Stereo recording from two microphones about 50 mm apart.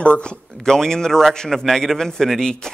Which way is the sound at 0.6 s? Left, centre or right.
Centre.